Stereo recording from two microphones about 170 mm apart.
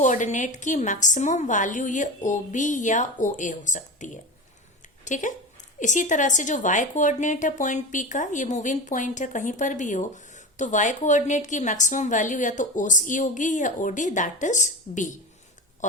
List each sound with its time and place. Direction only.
0.0 s a woman's voice: 45° left (ahead or behind)